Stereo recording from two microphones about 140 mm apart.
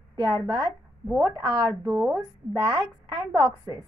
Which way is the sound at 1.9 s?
20° right (ahead or behind).